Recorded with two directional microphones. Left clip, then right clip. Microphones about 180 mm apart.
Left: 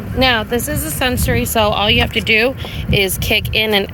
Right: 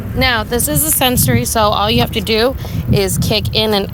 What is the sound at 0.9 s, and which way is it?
Speech, 25° right (ahead or behind).